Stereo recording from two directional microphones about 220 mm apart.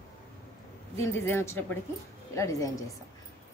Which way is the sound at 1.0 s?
10° left (ahead or behind).